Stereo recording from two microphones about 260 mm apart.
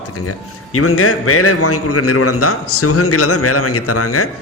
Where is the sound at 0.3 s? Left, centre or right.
Left.